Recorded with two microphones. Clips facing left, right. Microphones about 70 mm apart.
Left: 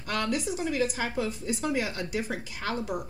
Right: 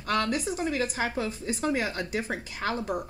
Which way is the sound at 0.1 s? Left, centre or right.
Right.